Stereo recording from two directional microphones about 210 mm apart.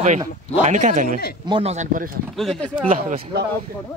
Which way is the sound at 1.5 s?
25° right (ahead or behind).